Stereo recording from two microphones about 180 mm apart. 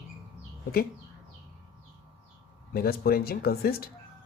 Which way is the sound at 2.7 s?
55° left (ahead or behind).